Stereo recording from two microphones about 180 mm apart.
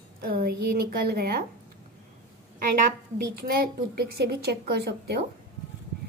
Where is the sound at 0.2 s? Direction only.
55° right (ahead or behind).